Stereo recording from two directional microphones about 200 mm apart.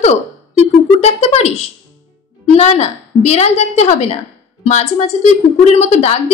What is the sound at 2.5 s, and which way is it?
A woman's voice, 35° left (ahead or behind).